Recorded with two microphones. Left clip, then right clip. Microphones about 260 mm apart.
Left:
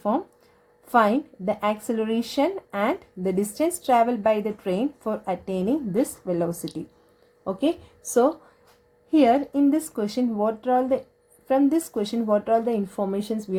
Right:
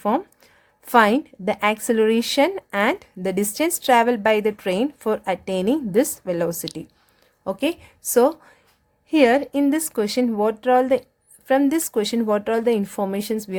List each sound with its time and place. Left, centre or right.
0.9 s a woman's voice: right
9.0 s a woman's voice: right